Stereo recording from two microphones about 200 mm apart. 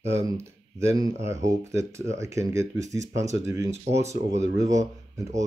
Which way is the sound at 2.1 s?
15° right (ahead or behind).